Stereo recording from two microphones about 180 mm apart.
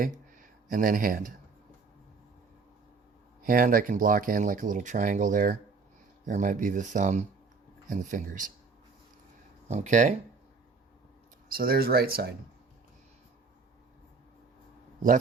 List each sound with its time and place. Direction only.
0.7 s speech: 50° right (ahead or behind)
3.4 s speech: 50° right (ahead or behind)
9.6 s speech: 40° right (ahead or behind)
11.4 s speech: 55° right (ahead or behind)